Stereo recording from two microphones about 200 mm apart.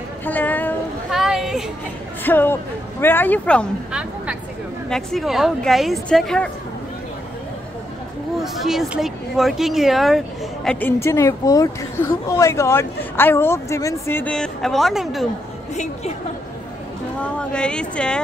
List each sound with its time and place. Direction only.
0.2 s a sound: 10° left (ahead or behind)
1.2 s a sound: centre (ahead or behind)
2.2 s speech: 10° left (ahead or behind)
4.8 s speech: centre (ahead or behind)
8.4 s speech: centre (ahead or behind)
15.7 s a woman's voice: 35° left (ahead or behind)
17.2 s speech: 5° left (ahead or behind)